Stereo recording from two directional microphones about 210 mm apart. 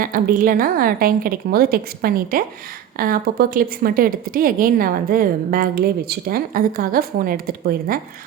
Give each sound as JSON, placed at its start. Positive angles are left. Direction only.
{"t": 0.0, "sound": "a woman's voice", "side_deg": -40}